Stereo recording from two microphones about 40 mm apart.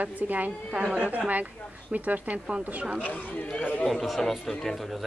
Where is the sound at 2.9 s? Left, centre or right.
Left.